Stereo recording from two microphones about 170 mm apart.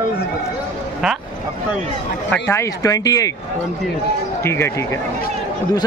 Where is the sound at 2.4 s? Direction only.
15° left (ahead or behind).